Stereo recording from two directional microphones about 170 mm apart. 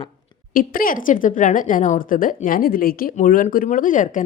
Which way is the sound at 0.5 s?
55° left (ahead or behind).